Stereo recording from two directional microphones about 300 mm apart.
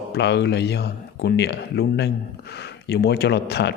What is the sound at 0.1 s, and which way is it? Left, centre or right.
Speech, left.